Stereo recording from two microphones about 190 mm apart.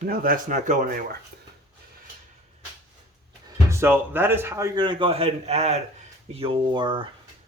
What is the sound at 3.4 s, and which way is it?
Speech, 15° right (ahead or behind).